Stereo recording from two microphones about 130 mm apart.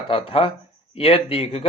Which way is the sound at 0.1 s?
45° left (ahead or behind).